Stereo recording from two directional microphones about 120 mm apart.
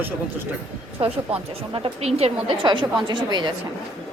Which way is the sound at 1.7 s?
55° right (ahead or behind).